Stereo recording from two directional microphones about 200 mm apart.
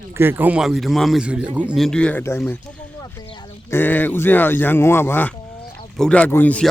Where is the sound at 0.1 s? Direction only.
10° right (ahead or behind); by 2.6 s 10° left (ahead or behind).